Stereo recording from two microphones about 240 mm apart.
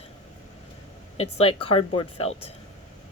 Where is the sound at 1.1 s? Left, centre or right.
Left.